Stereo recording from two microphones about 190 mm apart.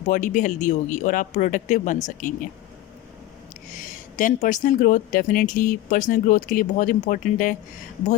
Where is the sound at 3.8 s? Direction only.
40° left (ahead or behind).